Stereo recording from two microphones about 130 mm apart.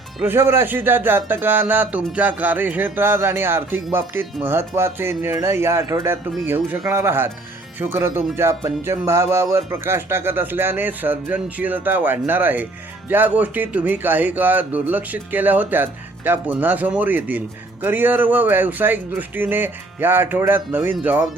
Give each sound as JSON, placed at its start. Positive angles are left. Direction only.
{"t": 0.2, "sound": "a man's voice", "side_deg": -15}